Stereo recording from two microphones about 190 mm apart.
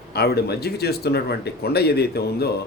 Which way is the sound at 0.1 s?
55° left (ahead or behind).